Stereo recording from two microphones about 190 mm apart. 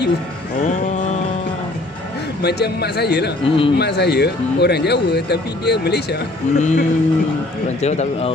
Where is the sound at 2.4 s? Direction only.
60° left (ahead or behind).